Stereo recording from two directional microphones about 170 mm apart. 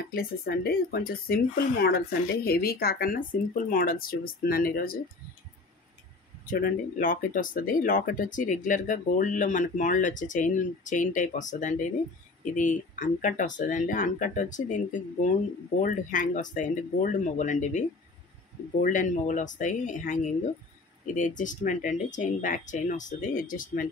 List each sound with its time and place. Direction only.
0.0 s speech: 60° left (ahead or behind)
6.4 s speech: 55° left (ahead or behind)